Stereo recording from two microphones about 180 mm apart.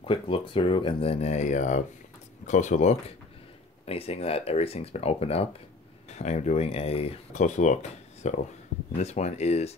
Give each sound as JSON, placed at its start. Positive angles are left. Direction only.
{"t": 0.0, "sound": "speech", "side_deg": 30}